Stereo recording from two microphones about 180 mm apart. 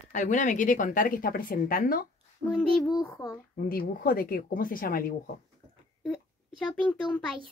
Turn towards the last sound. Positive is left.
turn(degrees=0)  # may be behind; listen again after turning